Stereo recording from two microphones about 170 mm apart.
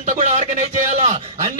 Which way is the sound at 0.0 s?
45° right (ahead or behind).